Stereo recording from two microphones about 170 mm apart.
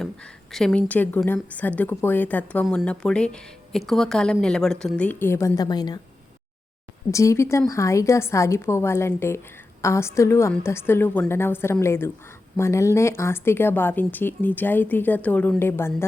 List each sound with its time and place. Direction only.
0.5 s a woman's voice: 5° left (ahead or behind); by 6.0 s 25° left (ahead or behind)
7.1 s a woman's voice: 20° left (ahead or behind)